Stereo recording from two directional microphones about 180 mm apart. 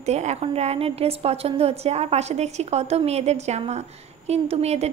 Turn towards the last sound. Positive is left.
turn(degrees=-35)  # may be behind; listen again after turning